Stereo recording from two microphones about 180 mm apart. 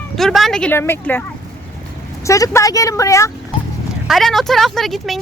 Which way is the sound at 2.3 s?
20° left (ahead or behind).